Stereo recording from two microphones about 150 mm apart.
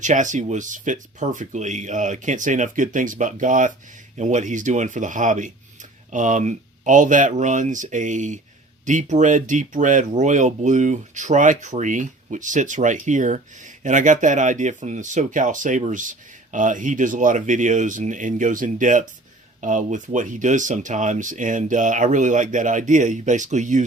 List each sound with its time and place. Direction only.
0.0 s speech: 55° right (ahead or behind)